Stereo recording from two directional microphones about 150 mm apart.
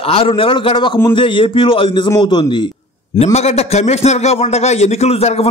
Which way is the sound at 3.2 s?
45° left (ahead or behind).